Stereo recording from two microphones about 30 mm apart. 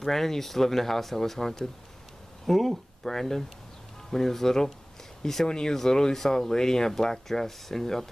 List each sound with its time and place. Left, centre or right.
0.0 s speech: centre